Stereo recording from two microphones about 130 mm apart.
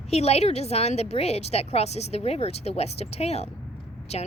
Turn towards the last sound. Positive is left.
turn(degrees=55)  # may be behind; listen again after turning